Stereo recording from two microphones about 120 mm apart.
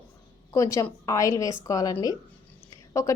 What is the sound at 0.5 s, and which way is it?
A woman's voice, 25° left (ahead or behind).